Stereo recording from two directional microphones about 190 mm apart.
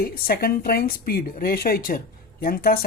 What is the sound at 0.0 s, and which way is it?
Speech, 50° left (ahead or behind).